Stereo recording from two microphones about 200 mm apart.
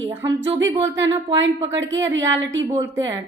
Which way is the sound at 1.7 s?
70° right (ahead or behind).